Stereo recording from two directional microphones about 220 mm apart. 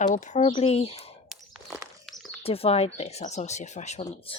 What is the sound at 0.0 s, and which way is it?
Speech, 35° left (ahead or behind).